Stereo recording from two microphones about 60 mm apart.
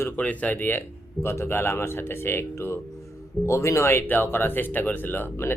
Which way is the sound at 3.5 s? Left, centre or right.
Left.